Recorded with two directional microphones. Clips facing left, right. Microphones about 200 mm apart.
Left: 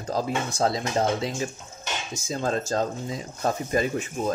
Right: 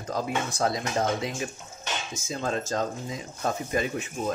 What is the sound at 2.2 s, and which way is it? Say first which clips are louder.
Speech: left 3 dB; 35° left (ahead or behind).